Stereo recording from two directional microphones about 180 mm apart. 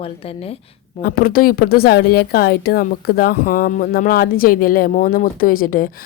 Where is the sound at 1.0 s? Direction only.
55° left (ahead or behind).